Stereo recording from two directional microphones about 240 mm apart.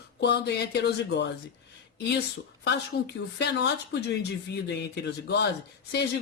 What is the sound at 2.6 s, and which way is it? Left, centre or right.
Speech, left.